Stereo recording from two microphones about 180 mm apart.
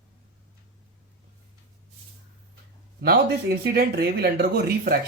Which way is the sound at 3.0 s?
60° right (ahead or behind).